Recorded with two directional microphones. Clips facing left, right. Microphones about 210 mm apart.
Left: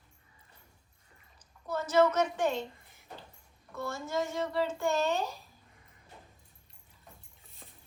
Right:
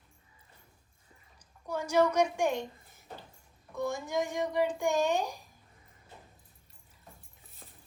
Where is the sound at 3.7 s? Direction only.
15° right (ahead or behind).